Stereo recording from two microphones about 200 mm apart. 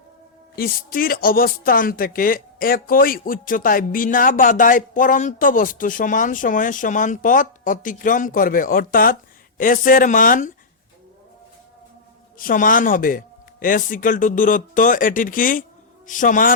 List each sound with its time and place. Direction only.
0.5 s speech: 45° left (ahead or behind)
12.4 s speech: 45° left (ahead or behind)